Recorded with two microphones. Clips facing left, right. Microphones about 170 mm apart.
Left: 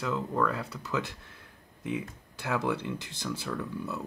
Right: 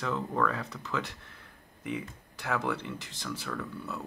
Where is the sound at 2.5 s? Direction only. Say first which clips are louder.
Left 2 dB; 15° left (ahead or behind).